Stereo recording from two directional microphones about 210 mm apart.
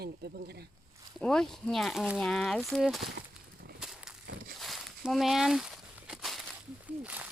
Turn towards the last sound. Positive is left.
turn(degrees=-5)  # may be behind; listen again after turning